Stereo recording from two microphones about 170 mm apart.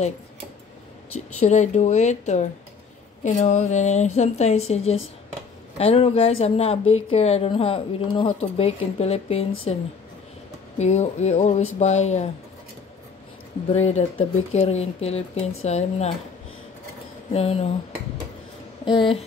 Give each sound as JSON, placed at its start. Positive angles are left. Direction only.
{"t": 1.4, "sound": "speech", "side_deg": 45}
{"t": 10.8, "sound": "speech", "side_deg": 40}
{"t": 13.7, "sound": "speech", "side_deg": 40}
{"t": 17.3, "sound": "speech", "side_deg": 35}
{"t": 18.9, "sound": "speech", "side_deg": 30}